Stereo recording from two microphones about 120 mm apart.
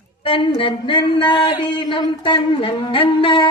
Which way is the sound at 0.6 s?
45° left (ahead or behind).